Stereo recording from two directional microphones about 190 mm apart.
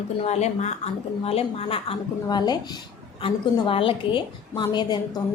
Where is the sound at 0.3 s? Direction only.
35° left (ahead or behind).